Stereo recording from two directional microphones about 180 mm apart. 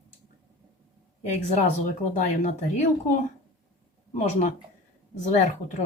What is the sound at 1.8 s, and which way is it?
Speech, 40° left (ahead or behind).